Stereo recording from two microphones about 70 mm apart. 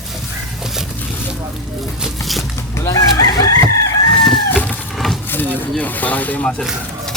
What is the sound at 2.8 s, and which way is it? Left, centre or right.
Chicken, left.